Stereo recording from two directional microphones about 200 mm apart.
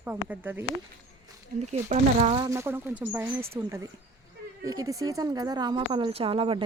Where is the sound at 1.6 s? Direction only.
35° right (ahead or behind).